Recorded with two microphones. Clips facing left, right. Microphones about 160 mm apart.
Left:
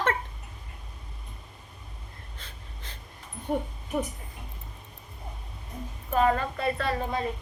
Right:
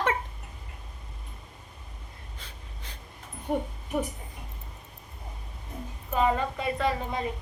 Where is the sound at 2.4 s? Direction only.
10° right (ahead or behind).